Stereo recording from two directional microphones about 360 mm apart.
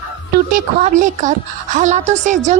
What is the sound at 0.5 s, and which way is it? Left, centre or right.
A woman's voice, right.